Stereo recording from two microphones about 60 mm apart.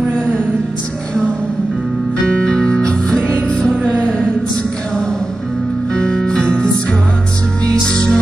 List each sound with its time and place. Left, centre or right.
2.2 s music: centre
5.9 s music: centre